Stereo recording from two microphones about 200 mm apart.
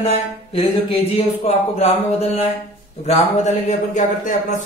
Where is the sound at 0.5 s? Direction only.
30° left (ahead or behind).